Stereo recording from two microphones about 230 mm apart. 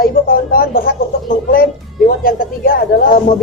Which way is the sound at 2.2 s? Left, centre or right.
Left.